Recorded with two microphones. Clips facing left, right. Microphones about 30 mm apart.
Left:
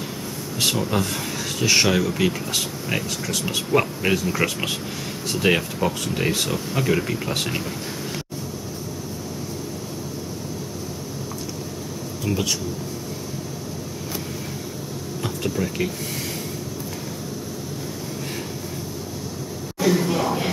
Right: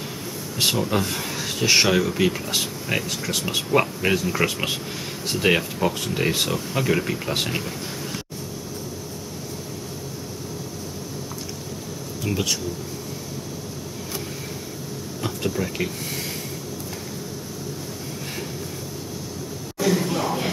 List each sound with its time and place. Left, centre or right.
0.6 s speech: centre
12.3 s speech: centre
15.2 s speech: centre
19.8 s a sound: centre